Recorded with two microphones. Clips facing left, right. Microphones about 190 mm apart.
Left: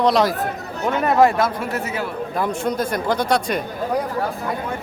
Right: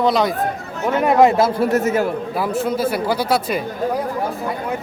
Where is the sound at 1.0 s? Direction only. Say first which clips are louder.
Right 2 dB; 15° right (ahead or behind).